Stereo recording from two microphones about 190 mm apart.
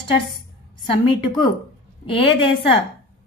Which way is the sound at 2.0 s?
30° left (ahead or behind).